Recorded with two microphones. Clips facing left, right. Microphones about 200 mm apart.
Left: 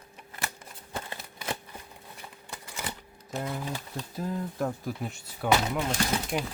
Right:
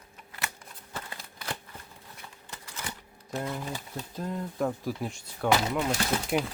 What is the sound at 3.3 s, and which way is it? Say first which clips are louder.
Speech: even; centre (ahead or behind).